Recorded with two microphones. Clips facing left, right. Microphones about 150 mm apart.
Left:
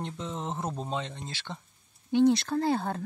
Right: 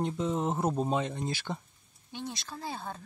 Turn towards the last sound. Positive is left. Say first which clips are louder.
# left 11 dB
turn(degrees=65)  # may be behind; listen again after turning